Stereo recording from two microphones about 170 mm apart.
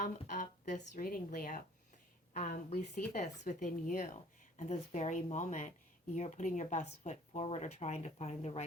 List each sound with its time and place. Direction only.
0.0 s a woman's voice: 45° left (ahead or behind)